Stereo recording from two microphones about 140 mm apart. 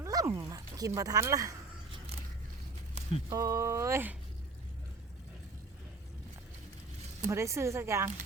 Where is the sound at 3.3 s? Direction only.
25° right (ahead or behind).